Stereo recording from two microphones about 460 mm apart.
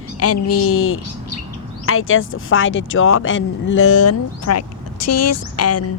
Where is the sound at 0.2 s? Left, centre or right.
Left.